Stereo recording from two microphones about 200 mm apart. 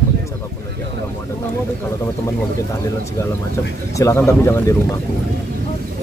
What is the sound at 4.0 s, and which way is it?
Speech, 15° left (ahead or behind).